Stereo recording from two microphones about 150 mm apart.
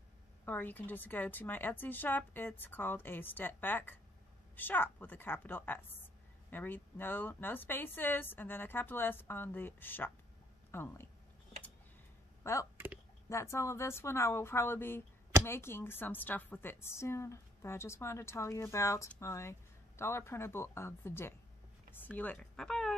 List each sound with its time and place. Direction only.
0.5 s a woman's voice: 10° left (ahead or behind)
12.7 s a sound: 15° right (ahead or behind)
13.3 s a woman's voice: 20° left (ahead or behind)